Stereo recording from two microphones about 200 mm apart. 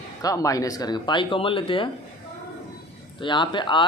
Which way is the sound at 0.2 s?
15° left (ahead or behind).